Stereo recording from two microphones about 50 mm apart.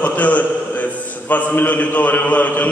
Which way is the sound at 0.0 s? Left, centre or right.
Left.